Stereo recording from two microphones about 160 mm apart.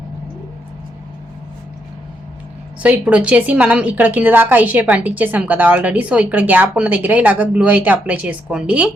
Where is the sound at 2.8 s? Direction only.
10° right (ahead or behind).